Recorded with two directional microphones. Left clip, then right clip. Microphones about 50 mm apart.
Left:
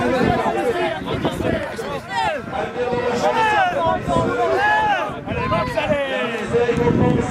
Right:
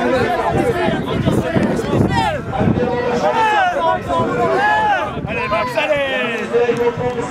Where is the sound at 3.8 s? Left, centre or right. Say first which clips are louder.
Right 2 dB; centre.